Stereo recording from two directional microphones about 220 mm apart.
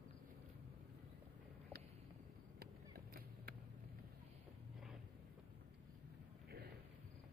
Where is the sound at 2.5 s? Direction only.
45° right (ahead or behind).